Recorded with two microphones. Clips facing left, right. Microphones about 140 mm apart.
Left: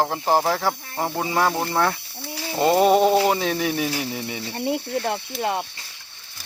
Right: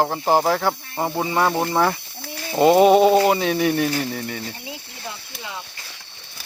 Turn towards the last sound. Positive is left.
turn(degrees=60)  # may be behind; listen again after turning